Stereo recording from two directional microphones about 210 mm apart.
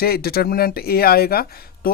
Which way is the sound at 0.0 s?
45° left (ahead or behind).